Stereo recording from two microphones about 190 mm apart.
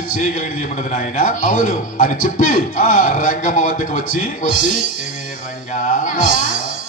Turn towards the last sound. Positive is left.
turn(degrees=45)  # may be behind; listen again after turning